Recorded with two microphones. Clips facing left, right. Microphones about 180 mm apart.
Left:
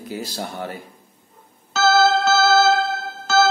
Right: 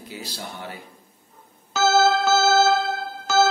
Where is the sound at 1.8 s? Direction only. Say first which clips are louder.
Left 2 dB; 15° right (ahead or behind).